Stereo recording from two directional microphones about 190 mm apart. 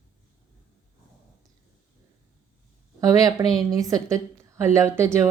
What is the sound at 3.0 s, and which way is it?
Speech, 20° right (ahead or behind).